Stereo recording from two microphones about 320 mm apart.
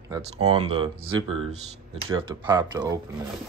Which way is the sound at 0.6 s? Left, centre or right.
Centre.